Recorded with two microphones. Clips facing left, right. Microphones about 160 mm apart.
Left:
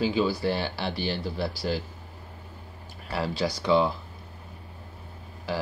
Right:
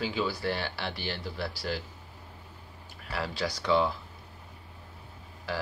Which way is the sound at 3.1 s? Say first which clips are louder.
Left 5 dB; 25° left (ahead or behind).